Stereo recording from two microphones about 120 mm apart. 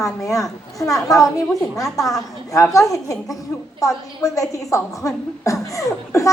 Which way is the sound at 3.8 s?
30° left (ahead or behind).